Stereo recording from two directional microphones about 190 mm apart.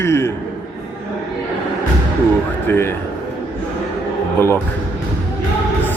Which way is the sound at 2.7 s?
10° left (ahead or behind).